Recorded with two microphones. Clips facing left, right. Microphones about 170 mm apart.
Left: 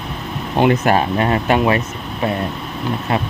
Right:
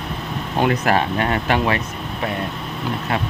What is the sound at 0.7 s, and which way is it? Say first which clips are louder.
Speech: left 3 dB; 30° left (ahead or behind).